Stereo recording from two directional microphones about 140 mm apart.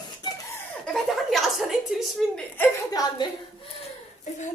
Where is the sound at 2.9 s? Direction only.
25° left (ahead or behind).